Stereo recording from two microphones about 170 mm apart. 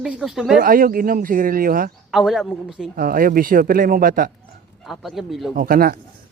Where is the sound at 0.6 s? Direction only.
55° right (ahead or behind).